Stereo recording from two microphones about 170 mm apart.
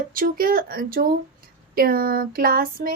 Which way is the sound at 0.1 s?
55° right (ahead or behind).